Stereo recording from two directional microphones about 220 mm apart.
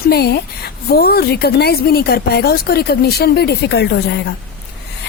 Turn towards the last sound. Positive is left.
turn(degrees=50)  # may be behind; listen again after turning